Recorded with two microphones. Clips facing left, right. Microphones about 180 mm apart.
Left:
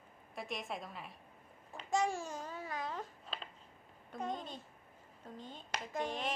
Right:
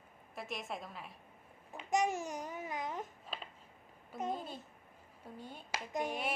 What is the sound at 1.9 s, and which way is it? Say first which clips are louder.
Speech: right 1 dB; 20° right (ahead or behind).